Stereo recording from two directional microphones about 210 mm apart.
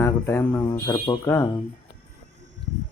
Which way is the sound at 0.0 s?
10° left (ahead or behind).